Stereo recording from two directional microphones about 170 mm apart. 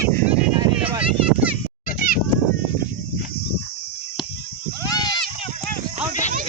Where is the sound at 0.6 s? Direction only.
30° right (ahead or behind).